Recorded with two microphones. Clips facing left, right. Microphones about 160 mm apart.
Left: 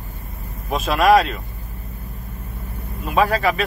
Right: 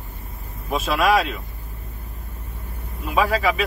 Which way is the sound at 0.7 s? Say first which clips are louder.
Left 4 dB; 5° right (ahead or behind).